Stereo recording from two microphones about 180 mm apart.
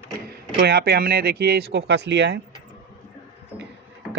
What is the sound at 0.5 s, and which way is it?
Speech, 65° right (ahead or behind).